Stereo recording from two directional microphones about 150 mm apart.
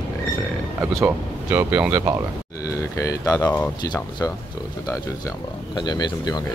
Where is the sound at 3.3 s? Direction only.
25° left (ahead or behind).